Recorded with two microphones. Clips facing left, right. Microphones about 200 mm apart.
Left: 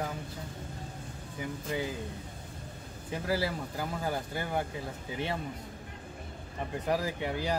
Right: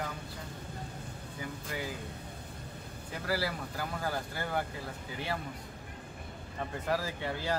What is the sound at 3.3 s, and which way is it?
Speech, 20° left (ahead or behind).